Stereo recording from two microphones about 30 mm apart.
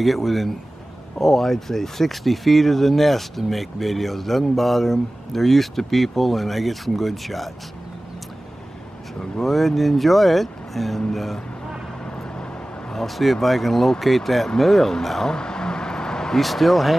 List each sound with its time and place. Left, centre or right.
0.0 s speech: centre
9.2 s speech: centre
12.9 s speech: centre
15.2 s vehicle: left
16.3 s speech: centre